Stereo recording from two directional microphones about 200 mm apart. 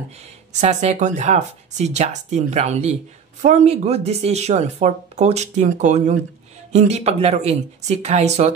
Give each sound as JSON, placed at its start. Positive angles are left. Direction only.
{"t": 0.5, "sound": "speech", "side_deg": -35}